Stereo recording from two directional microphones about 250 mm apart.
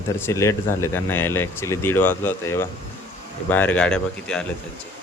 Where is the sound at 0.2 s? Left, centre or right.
Centre.